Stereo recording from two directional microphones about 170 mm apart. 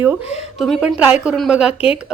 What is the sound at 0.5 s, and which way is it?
A woman's voice, centre (ahead or behind).